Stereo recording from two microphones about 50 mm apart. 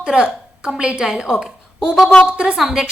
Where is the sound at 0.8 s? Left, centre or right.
Centre.